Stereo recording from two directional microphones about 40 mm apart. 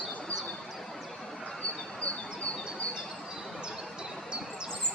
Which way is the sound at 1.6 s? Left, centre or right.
Left.